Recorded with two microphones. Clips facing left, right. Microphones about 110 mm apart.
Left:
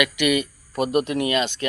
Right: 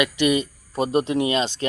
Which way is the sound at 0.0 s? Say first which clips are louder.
Right 1 dB; 30° right (ahead or behind).